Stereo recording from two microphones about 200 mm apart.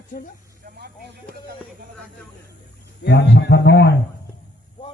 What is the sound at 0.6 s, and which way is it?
Snake, 50° right (ahead or behind).